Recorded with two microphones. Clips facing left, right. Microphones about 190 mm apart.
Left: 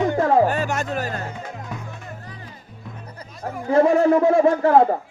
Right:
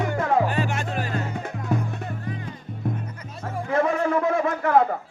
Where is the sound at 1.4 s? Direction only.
60° right (ahead or behind).